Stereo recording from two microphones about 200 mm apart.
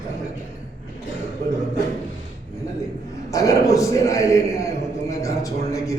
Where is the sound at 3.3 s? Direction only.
15° left (ahead or behind).